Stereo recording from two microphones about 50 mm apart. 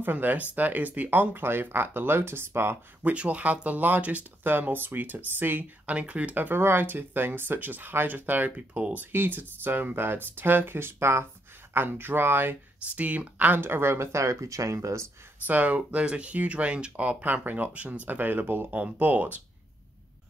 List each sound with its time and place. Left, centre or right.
0.0 s speech: right
3.0 s speech: right
5.9 s speech: right
9.1 s speech: right
11.7 s speech: right
12.9 s speech: right
13.5 s speech: right
15.4 s speech: right